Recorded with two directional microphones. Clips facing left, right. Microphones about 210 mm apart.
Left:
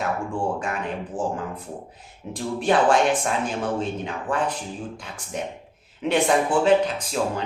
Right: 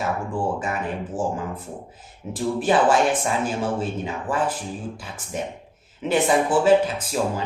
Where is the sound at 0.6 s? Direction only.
5° right (ahead or behind).